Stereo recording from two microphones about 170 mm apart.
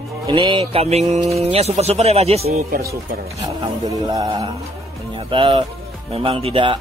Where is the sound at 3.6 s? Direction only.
25° right (ahead or behind).